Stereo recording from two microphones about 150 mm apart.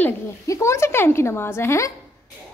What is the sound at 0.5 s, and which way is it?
A woman's voice, 20° left (ahead or behind).